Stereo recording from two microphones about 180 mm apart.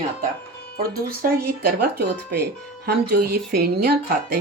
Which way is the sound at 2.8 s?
60° right (ahead or behind).